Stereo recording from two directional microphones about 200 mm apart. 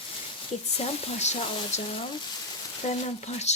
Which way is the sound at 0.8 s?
35° left (ahead or behind).